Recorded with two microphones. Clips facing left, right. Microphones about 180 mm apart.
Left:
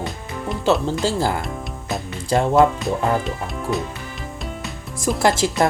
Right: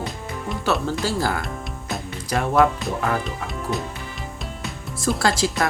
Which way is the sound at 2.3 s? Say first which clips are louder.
Left 3 dB; 30° left (ahead or behind).